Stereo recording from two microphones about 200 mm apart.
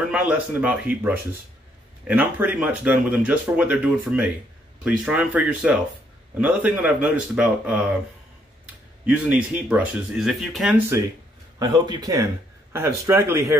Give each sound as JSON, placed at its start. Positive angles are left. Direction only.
{"t": 0.1, "sound": "speech", "side_deg": -5}
{"t": 9.0, "sound": "speech", "side_deg": -5}
{"t": 11.6, "sound": "a man's voice", "side_deg": -20}